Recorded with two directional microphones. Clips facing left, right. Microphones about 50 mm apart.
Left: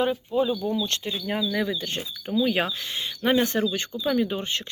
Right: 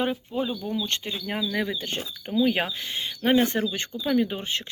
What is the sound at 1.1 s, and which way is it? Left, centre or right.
Speech, centre.